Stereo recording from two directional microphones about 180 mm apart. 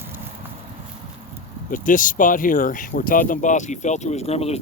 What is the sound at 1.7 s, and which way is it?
Speech, 45° left (ahead or behind).